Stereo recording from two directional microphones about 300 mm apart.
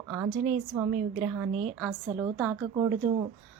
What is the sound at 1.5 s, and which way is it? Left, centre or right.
Speech, right.